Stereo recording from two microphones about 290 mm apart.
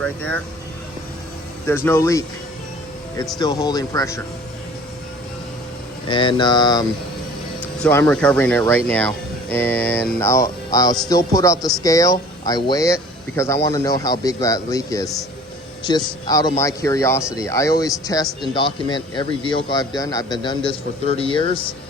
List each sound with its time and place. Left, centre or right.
0.0 s speech: centre
1.6 s speech: centre
3.3 s speech: centre
6.1 s speech: centre